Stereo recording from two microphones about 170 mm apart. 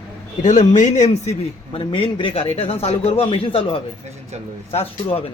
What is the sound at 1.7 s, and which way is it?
Speech, 30° left (ahead or behind).